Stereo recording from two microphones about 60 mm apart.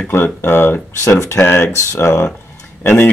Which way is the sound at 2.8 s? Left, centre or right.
Left.